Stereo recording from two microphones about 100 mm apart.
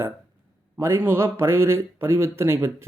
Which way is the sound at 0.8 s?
25° right (ahead or behind).